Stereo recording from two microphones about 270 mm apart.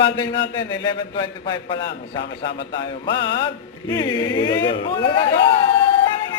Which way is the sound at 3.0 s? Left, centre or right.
Centre.